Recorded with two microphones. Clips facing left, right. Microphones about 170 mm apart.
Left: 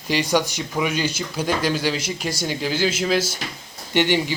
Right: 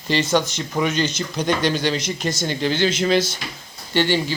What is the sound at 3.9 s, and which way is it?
Speech, 15° left (ahead or behind).